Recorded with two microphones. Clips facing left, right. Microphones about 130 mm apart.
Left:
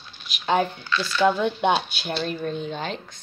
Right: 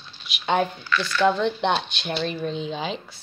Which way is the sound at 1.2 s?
5° left (ahead or behind).